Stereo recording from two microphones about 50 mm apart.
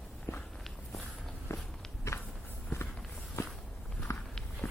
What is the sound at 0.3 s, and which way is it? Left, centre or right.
Walk, left.